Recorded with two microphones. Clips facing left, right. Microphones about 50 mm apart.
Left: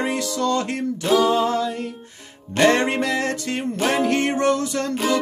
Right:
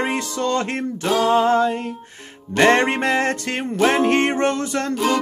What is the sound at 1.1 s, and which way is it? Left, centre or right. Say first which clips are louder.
Music: right 2 dB; right.